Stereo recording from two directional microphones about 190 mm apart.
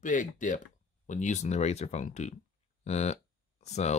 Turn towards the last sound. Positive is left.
turn(degrees=35)  # may be behind; listen again after turning